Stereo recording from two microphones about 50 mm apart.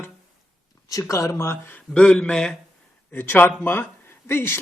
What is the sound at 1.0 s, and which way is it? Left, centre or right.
Speech, left.